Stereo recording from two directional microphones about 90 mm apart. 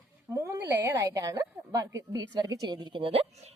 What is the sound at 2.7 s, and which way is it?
Speech, 60° right (ahead or behind).